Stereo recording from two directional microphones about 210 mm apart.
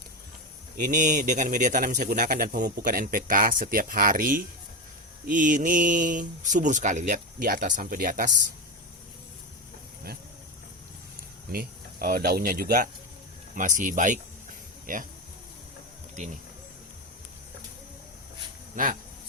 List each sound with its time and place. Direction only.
0.9 s a man's voice: 40° right (ahead or behind)
11.5 s a man's voice: 45° right (ahead or behind)
16.2 s a man's voice: 35° right (ahead or behind)
18.8 s a man's voice: 40° right (ahead or behind)